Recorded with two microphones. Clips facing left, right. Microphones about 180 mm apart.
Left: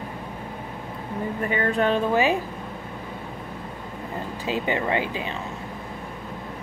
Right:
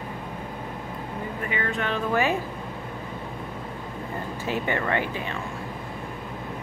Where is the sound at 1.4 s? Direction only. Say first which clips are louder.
Left 7 dB; 40° left (ahead or behind).